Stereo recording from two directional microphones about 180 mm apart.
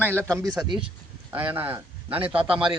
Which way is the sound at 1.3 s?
10° right (ahead or behind).